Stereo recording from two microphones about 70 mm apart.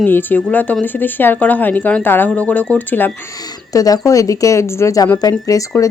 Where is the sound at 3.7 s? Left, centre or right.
Left.